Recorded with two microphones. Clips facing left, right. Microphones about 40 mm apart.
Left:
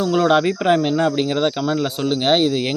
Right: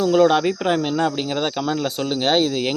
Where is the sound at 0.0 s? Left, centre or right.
Centre.